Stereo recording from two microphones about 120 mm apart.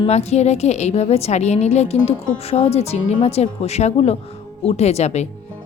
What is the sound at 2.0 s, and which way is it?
A woman's voice, 55° left (ahead or behind).